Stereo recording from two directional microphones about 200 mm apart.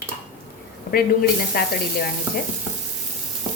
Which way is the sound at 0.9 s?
50° left (ahead or behind).